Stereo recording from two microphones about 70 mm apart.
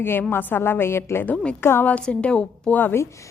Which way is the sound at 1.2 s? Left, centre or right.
Centre.